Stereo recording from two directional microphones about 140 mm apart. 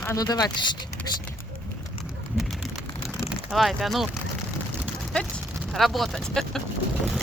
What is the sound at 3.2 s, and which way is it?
Speech, 5° right (ahead or behind).